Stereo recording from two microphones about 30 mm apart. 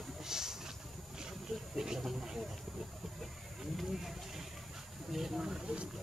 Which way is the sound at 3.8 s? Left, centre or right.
Centre.